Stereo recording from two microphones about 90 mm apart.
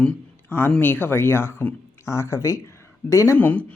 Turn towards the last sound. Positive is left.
turn(degrees=15)  # may be behind; listen again after turning